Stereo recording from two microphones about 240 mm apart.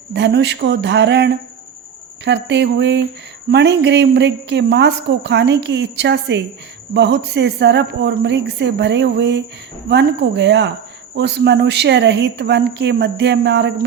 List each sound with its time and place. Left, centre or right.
0.1 s a woman's voice: right